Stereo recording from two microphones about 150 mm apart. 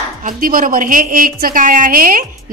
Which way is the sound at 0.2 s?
65° right (ahead or behind).